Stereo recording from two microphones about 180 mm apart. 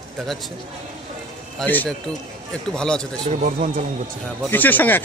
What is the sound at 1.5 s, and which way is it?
Speech, 5° left (ahead or behind).